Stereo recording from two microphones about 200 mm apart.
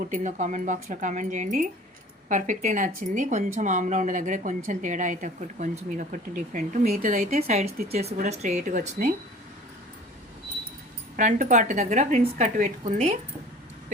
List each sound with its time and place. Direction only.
0.1 s a woman's voice: 40° right (ahead or behind)
7.9 s a woman's voice: 30° right (ahead or behind)
11.2 s a woman's voice: 40° right (ahead or behind)